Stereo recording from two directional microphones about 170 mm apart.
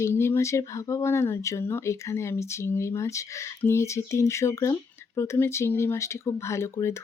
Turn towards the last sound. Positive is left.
turn(degrees=15)  # may be behind; listen again after turning